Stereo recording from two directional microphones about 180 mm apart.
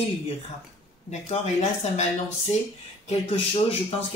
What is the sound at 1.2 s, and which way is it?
Speech, 35° left (ahead or behind).